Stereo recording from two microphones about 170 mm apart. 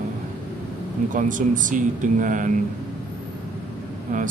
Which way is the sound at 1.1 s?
50° right (ahead or behind).